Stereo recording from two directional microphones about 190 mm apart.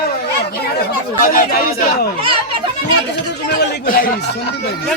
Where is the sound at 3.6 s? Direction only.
55° left (ahead or behind).